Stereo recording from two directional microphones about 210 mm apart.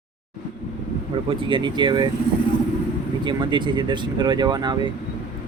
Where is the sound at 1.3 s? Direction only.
25° right (ahead or behind).